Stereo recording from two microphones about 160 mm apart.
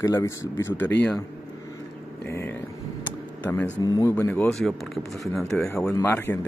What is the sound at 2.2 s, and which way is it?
Speech, 15° left (ahead or behind).